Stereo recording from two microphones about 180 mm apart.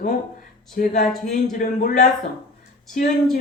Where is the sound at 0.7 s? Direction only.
45° left (ahead or behind).